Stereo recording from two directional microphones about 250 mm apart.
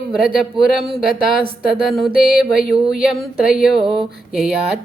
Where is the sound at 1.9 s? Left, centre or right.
Centre.